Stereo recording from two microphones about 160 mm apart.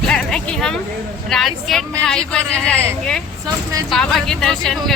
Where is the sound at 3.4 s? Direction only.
20° right (ahead or behind).